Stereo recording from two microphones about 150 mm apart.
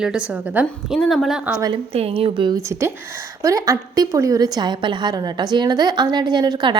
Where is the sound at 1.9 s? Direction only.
40° right (ahead or behind).